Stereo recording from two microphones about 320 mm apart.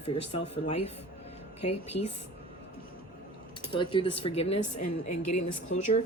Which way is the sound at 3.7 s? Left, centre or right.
Centre.